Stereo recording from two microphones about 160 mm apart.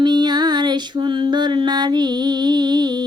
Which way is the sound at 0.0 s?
25° right (ahead or behind).